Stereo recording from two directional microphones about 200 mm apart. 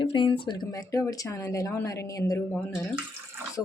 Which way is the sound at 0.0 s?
25° left (ahead or behind).